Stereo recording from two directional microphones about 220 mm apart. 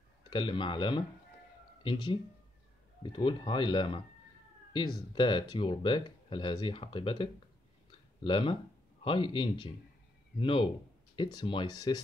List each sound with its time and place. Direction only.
0.3 s speech: 20° left (ahead or behind)
5.1 s speech: 20° left (ahead or behind)